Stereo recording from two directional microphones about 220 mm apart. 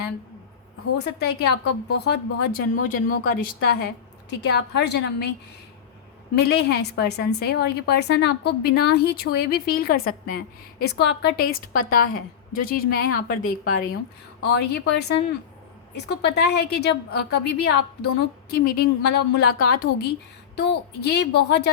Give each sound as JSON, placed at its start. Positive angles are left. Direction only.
{"t": 0.9, "sound": "a woman's voice", "side_deg": 50}
{"t": 6.3, "sound": "a woman's voice", "side_deg": 45}